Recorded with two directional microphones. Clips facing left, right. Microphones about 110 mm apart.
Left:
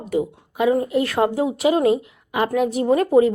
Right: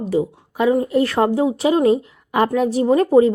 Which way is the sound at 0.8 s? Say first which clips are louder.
Right 3 dB; 35° right (ahead or behind).